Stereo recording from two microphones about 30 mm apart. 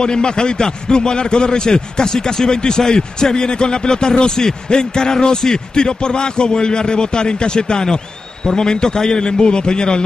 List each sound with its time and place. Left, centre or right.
0.0 s a man's voice: left